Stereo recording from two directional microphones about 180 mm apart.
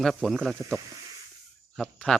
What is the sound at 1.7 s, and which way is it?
Speech, 5° left (ahead or behind).